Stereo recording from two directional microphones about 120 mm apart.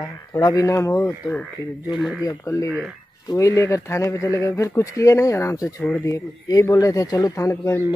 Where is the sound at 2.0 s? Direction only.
Centre (ahead or behind).